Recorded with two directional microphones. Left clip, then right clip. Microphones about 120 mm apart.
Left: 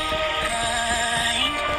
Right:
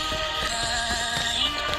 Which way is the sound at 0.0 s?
35° left (ahead or behind).